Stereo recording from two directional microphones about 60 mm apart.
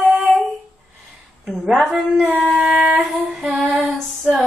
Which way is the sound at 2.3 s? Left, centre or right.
Right.